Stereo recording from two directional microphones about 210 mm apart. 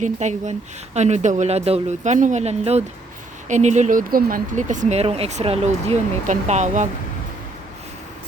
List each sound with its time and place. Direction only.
0.0 s speech: 35° right (ahead or behind)